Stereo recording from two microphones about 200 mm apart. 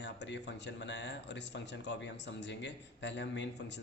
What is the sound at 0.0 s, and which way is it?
A man's voice, 60° left (ahead or behind).